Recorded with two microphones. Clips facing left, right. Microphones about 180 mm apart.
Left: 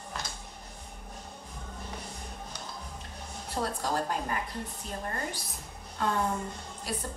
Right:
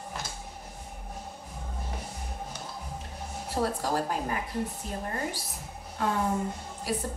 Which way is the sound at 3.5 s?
10° right (ahead or behind).